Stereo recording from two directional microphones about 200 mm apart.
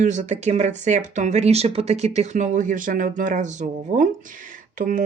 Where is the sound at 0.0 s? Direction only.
35° right (ahead or behind).